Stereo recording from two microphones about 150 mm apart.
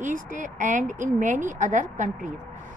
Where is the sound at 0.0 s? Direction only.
60° right (ahead or behind).